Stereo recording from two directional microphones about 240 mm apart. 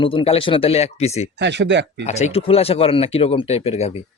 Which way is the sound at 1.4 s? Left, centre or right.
Right.